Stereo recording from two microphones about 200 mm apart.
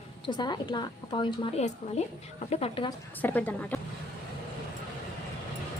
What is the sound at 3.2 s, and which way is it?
Speech, 10° left (ahead or behind).